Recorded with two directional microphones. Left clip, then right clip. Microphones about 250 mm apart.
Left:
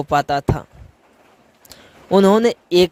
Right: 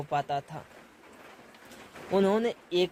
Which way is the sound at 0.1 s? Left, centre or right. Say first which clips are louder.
Left 13 dB; left.